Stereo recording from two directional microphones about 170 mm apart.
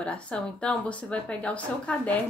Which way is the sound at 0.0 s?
5° left (ahead or behind).